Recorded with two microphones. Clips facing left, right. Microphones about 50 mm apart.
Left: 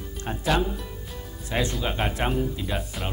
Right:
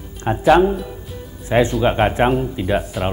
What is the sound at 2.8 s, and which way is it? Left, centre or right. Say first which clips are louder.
Speech: right 10 dB; centre.